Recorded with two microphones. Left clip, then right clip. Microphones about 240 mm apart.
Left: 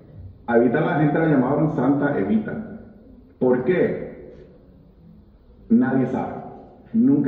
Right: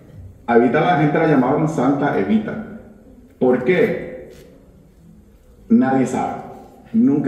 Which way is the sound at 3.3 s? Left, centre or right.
Right.